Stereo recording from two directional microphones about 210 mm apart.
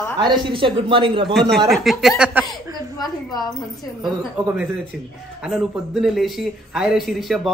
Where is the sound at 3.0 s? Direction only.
20° left (ahead or behind).